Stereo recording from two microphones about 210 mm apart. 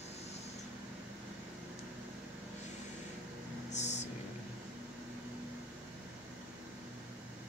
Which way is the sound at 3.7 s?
35° left (ahead or behind).